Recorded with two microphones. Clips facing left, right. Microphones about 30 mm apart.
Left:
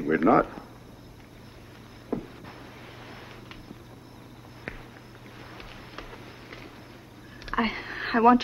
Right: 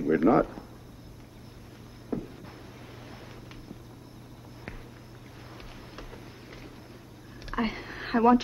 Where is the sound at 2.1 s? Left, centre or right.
Centre.